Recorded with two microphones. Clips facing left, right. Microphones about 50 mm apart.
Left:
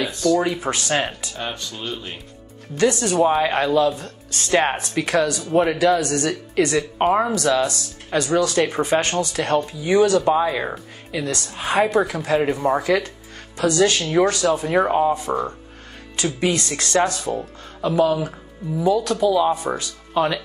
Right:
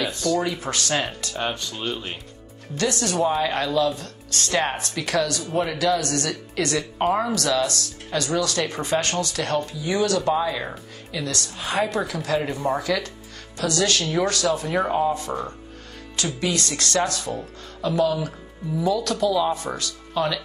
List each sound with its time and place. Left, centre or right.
0.2 s speech: centre
0.6 s speech: centre
1.7 s speech: centre
2.8 s speech: centre